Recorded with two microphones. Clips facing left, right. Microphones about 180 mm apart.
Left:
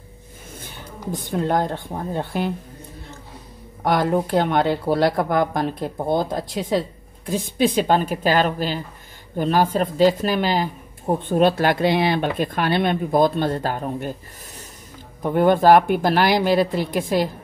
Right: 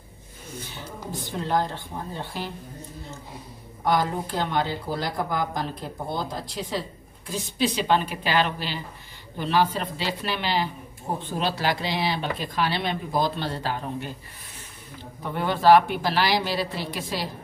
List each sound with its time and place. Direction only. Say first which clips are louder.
0.6 s speech: right 1 dB; 50° left (ahead or behind)
3.8 s speech: left 5 dB; 60° left (ahead or behind)
15.2 s speech: left 5 dB; 50° left (ahead or behind)